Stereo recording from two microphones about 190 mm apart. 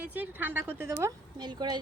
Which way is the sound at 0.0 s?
10° right (ahead or behind).